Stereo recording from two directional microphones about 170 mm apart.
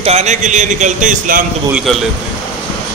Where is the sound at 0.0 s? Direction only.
40° right (ahead or behind).